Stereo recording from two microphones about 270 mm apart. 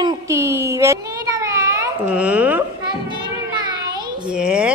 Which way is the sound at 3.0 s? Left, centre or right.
Centre.